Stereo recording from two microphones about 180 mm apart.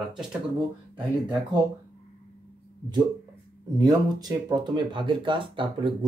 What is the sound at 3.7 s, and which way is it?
Speech, 20° right (ahead or behind).